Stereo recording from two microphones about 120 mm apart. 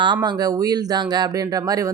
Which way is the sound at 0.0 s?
35° right (ahead or behind).